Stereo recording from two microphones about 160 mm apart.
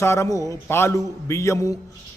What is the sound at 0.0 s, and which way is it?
A man's voice, 20° left (ahead or behind).